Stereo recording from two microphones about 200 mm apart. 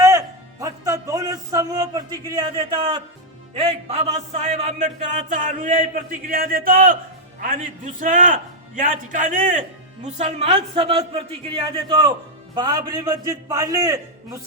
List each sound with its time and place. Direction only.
0.0 s music: 15° right (ahead or behind)
3.5 s a man's voice: 30° right (ahead or behind)